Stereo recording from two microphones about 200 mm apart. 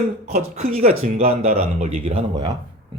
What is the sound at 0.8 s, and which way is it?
Speech, 30° right (ahead or behind).